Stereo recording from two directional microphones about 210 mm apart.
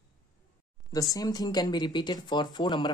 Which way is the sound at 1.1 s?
20° left (ahead or behind).